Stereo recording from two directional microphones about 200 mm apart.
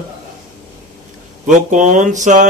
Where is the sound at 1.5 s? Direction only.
40° right (ahead or behind).